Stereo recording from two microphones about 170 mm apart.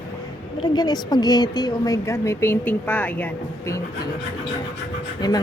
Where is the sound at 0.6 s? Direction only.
25° left (ahead or behind).